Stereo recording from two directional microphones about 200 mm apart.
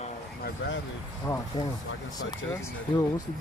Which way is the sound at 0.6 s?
65° left (ahead or behind).